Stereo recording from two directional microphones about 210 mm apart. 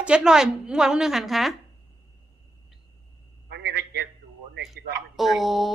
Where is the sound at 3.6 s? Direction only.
50° right (ahead or behind).